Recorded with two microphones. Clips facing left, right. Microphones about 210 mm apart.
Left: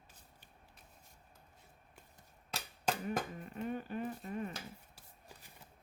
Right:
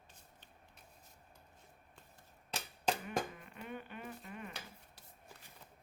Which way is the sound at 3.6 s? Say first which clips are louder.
Left 8 dB; 40° left (ahead or behind).